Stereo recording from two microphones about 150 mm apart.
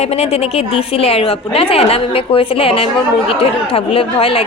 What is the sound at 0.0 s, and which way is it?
A woman's voice, 45° left (ahead or behind).